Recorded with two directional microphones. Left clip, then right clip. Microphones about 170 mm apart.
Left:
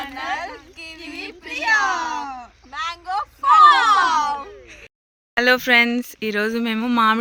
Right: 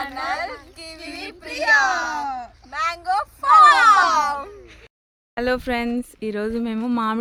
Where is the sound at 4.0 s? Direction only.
15° right (ahead or behind).